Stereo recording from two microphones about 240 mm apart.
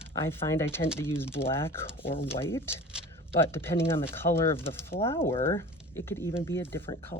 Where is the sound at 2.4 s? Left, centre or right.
Centre.